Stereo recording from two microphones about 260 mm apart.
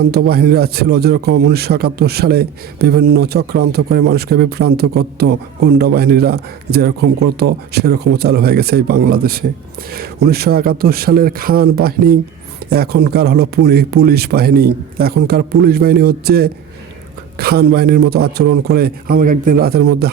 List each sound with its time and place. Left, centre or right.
0.1 s speech: right